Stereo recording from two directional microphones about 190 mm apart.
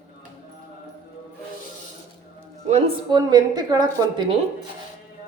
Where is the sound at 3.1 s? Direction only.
20° right (ahead or behind).